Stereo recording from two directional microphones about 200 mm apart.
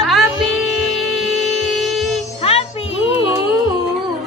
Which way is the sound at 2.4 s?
30° left (ahead or behind).